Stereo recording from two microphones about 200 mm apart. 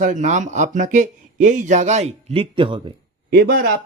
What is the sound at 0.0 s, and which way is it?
Speech, 40° right (ahead or behind).